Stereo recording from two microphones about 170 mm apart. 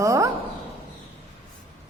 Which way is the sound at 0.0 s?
20° right (ahead or behind).